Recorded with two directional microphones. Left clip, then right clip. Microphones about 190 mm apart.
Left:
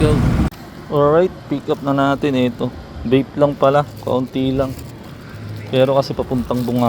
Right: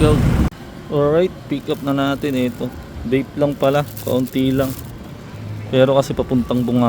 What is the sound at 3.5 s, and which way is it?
Speech, 10° right (ahead or behind).